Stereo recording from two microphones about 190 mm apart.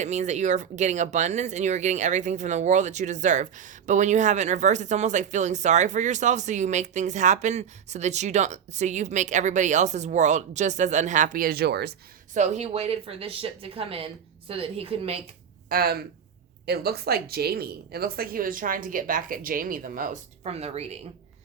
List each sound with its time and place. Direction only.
0.0 s speech: 40° right (ahead or behind); by 11.9 s 60° right (ahead or behind)
12.3 s speech: 35° right (ahead or behind)
15.7 s speech: 55° right (ahead or behind); by 21.0 s 35° right (ahead or behind)